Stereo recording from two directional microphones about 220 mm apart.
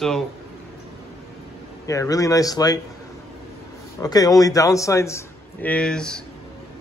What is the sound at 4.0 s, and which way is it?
A man's voice, 15° left (ahead or behind).